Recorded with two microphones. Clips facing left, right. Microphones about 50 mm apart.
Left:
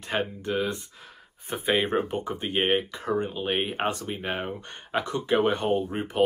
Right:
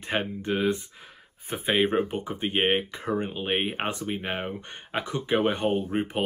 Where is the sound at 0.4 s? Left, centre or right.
Right.